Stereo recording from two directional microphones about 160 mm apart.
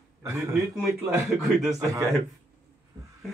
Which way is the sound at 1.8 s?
20° right (ahead or behind).